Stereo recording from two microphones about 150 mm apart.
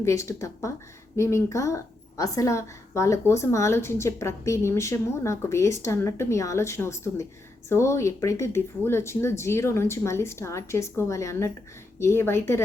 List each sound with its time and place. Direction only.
0.0 s a woman's voice: 20° left (ahead or behind)